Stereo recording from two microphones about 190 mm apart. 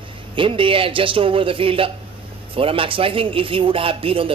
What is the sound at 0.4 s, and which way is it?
Speech, 30° right (ahead or behind).